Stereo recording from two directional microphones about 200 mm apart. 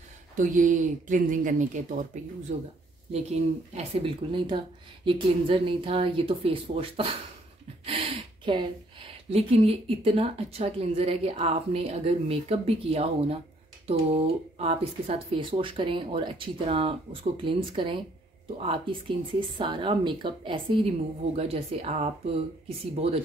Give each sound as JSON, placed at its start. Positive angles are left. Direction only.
{"t": 0.4, "sound": "speech", "side_deg": -40}
{"t": 7.8, "sound": "gasp", "side_deg": -30}
{"t": 9.3, "sound": "speech", "side_deg": -30}